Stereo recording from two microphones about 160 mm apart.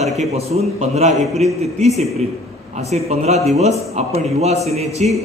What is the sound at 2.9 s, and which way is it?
A man's voice, 45° right (ahead or behind).